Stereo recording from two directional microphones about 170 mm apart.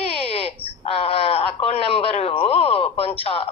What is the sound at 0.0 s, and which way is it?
Wail, 35° left (ahead or behind).